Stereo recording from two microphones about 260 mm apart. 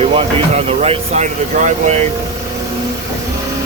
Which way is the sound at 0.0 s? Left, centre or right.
Right.